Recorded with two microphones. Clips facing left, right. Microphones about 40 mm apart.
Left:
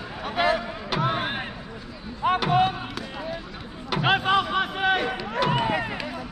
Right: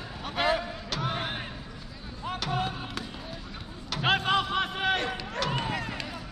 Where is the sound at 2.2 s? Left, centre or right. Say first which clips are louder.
Left 13 dB; left.